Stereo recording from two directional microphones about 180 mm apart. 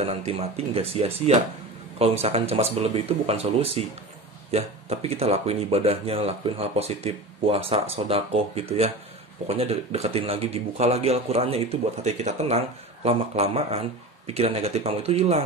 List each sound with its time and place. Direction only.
0.0 s speech: 30° right (ahead or behind)